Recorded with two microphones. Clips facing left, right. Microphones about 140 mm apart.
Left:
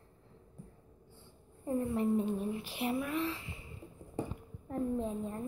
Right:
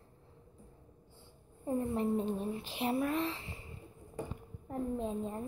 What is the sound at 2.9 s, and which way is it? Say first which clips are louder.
Speech: right 2 dB; 35° right (ahead or behind).